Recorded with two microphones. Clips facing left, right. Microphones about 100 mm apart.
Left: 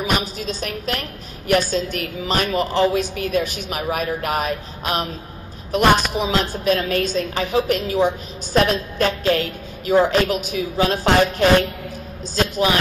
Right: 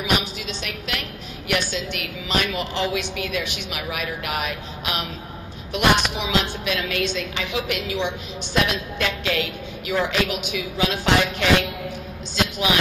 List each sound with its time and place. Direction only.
0.0 s a woman's voice: 40° left (ahead or behind)